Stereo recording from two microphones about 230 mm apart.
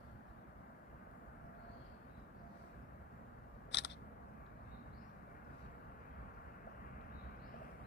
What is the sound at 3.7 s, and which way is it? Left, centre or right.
Single-lens reflex camera, left.